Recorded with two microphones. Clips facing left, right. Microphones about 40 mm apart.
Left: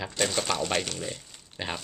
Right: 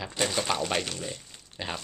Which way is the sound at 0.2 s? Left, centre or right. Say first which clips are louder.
Even; centre.